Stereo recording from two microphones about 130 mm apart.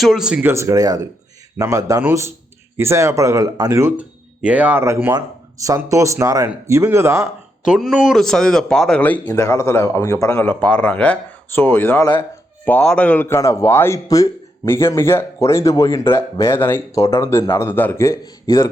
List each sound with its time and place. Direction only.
0.0 s a man's voice: centre (ahead or behind)
0.4 s speech: 20° right (ahead or behind)
7.6 s a man's voice: 5° right (ahead or behind); by 9.4 s 10° left (ahead or behind)
9.4 s a man's voice: 20° left (ahead or behind)